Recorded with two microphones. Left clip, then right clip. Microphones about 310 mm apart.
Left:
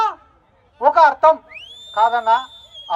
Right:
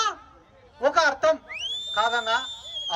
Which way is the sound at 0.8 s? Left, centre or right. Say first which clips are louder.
Left 9 dB; centre.